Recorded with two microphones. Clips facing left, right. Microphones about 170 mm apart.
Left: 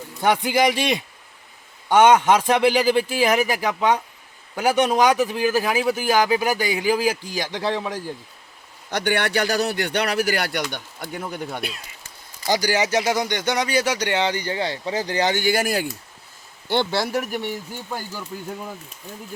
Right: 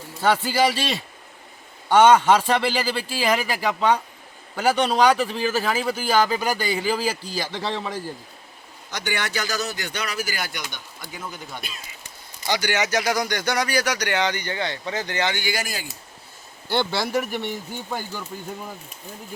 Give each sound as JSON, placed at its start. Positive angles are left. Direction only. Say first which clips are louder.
{"t": 0.2, "sound": "speech", "louder": "left 1 dB", "side_deg": 15}
{"t": 8.9, "sound": "speech", "louder": "left 6 dB", "side_deg": 60}
{"t": 12.5, "sound": "speech", "louder": "left 3 dB", "side_deg": 40}
{"t": 16.6, "sound": "speech", "louder": "left 2 dB", "side_deg": 20}
{"t": 17.1, "sound": "speech", "louder": "even", "side_deg": 10}